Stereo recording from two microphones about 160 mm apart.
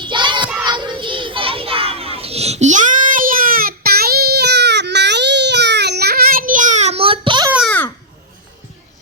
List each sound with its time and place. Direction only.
0.0 s child singing: 30° right (ahead or behind)
0.6 s children playing: 30° right (ahead or behind)